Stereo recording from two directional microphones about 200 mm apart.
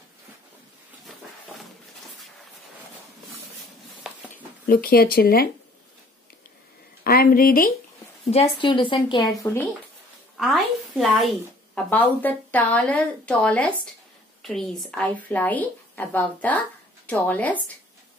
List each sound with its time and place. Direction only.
4.6 s speech: 50° left (ahead or behind)
7.0 s a woman's voice: 45° left (ahead or behind)
8.3 s a woman's voice: 30° left (ahead or behind)
10.4 s a woman's voice: centre (ahead or behind)